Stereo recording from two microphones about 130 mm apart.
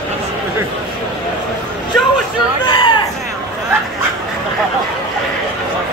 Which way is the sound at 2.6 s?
40° left (ahead or behind).